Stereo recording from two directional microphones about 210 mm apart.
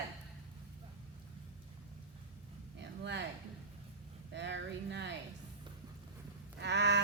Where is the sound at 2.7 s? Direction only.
55° right (ahead or behind).